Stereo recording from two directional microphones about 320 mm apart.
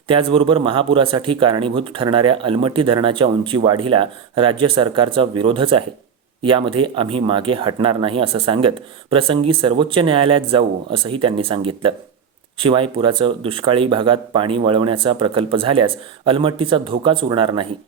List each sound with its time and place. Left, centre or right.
0.1 s speech: centre